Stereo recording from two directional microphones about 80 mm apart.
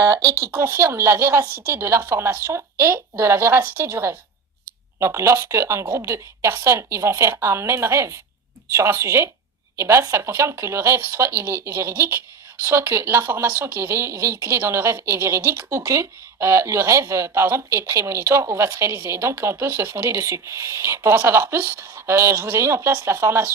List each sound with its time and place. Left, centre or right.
0.0 s speech: right
0.5 s speech: right